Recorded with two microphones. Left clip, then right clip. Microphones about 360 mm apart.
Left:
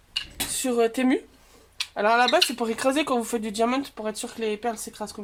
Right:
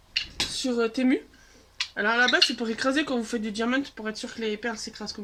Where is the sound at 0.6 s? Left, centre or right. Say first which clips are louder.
Left 4 dB; centre.